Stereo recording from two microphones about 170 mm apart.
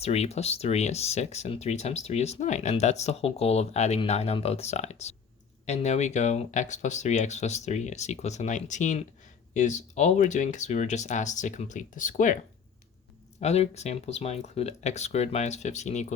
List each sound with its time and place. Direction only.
0.0 s speech: 40° left (ahead or behind)
13.4 s speech: 40° left (ahead or behind)